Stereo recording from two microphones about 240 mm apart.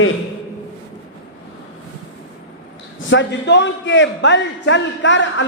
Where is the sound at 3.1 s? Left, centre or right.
Left.